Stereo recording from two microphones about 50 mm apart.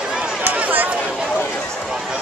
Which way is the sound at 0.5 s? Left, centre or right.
Right.